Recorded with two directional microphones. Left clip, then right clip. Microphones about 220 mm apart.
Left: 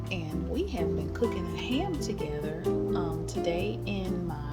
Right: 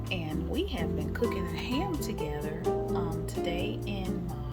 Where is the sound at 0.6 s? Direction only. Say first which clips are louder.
Left 4 dB; 5° right (ahead or behind).